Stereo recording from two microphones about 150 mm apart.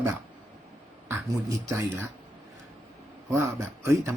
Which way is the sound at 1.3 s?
20° right (ahead or behind).